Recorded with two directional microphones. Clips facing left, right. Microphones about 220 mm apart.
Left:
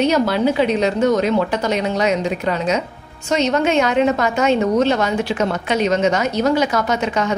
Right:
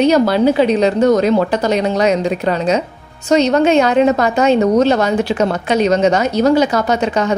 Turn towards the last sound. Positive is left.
turn(degrees=-35)  # may be behind; listen again after turning